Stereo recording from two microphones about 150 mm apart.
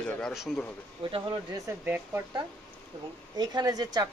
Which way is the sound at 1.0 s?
35° right (ahead or behind).